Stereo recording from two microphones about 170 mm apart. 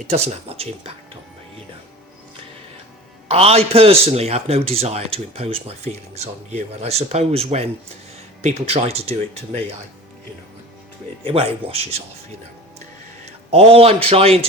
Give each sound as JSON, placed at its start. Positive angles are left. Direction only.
{"t": 0.1, "sound": "a man's voice", "side_deg": -35}
{"t": 3.2, "sound": "a man's voice", "side_deg": -35}
{"t": 11.2, "sound": "a man's voice", "side_deg": -35}
{"t": 13.2, "sound": "a man's voice", "side_deg": -35}